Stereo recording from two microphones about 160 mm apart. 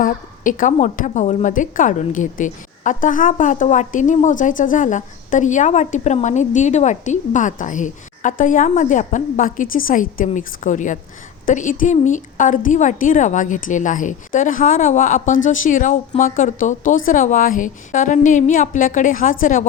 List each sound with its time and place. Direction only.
0.0 s a woman's voice: 55° left (ahead or behind)